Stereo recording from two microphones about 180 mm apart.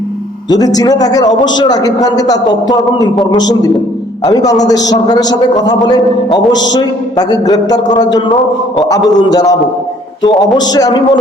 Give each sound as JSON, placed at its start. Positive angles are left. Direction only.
{"t": 0.5, "sound": "a man's voice", "side_deg": 20}
{"t": 6.7, "sound": "a man's voice", "side_deg": 20}
{"t": 10.7, "sound": "a man's voice", "side_deg": 20}